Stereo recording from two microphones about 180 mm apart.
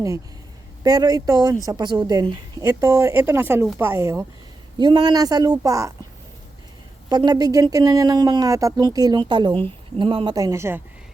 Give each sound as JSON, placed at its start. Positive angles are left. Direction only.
{"t": 0.9, "sound": "a woman's voice", "side_deg": -20}
{"t": 7.1, "sound": "speech", "side_deg": -25}